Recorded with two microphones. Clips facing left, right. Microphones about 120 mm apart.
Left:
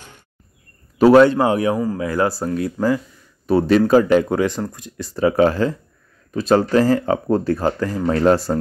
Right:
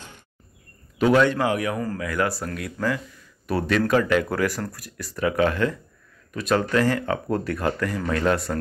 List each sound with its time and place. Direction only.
0.9 s speech: 35° left (ahead or behind)